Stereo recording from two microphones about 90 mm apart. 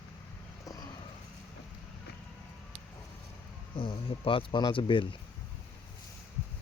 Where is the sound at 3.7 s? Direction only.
90° left; by 5.2 s 70° left (ahead or behind).